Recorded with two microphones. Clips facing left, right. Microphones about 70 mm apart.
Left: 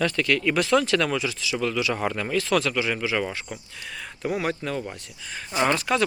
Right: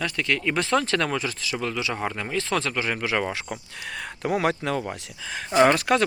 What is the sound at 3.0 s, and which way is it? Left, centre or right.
Speech, right.